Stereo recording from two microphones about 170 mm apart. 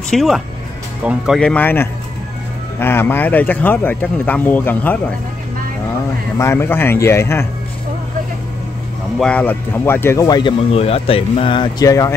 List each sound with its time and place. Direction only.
0.1 s speech: centre (ahead or behind)
6.3 s speech: 15° left (ahead or behind)
9.2 s speech: 10° left (ahead or behind)